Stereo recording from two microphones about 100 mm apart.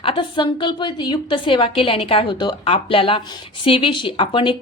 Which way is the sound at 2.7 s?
60° left (ahead or behind).